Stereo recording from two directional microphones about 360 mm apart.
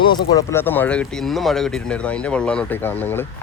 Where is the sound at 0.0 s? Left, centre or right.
Centre.